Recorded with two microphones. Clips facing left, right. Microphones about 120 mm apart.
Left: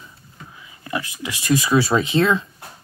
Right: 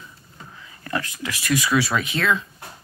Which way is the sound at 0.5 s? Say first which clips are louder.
Even; 15° left (ahead or behind).